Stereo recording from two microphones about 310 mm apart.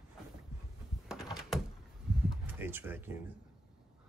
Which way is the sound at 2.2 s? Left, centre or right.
Centre.